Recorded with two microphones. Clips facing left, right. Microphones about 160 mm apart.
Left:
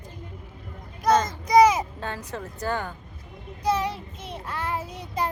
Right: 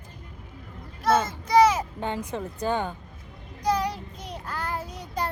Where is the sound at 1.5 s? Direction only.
10° left (ahead or behind).